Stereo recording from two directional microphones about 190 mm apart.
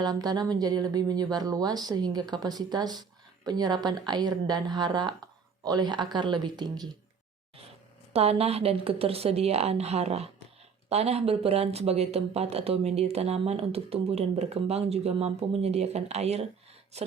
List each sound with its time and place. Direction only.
0.0 s speech: 20° right (ahead or behind)
8.1 s speech: 30° right (ahead or behind)